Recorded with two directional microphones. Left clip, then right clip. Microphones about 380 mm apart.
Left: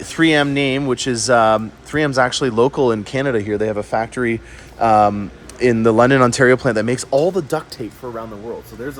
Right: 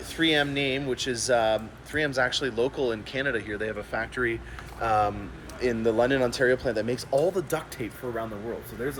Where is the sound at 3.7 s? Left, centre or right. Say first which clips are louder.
Left 12 dB; left.